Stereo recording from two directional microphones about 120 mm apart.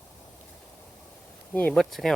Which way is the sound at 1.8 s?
Centre (ahead or behind).